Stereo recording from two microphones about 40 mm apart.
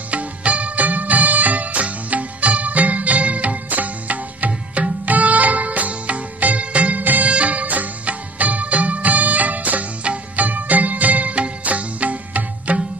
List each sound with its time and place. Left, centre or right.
0.1 s music: right
7.0 s music: right
7.2 s music: right
10.3 s music of bollywood: right